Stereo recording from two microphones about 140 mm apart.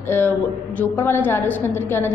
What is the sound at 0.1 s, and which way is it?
A woman's voice, 15° left (ahead or behind).